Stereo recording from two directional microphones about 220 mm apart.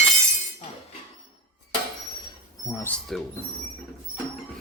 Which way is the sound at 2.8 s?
Centre (ahead or behind).